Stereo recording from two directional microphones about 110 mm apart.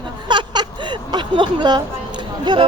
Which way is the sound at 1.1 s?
45° right (ahead or behind).